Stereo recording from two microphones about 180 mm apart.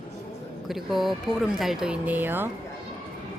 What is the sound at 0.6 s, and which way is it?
Speech, centre (ahead or behind).